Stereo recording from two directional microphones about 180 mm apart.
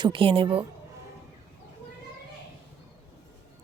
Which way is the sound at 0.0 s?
30° right (ahead or behind).